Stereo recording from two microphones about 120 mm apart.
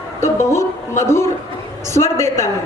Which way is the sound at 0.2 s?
25° left (ahead or behind).